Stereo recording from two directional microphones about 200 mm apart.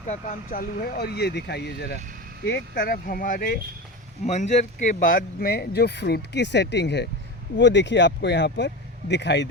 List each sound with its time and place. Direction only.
0.1 s speech: 40° left (ahead or behind); by 9.5 s 60° left (ahead or behind)